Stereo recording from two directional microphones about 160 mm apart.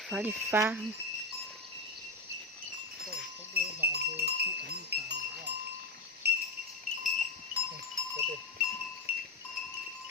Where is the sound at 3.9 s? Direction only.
80° right.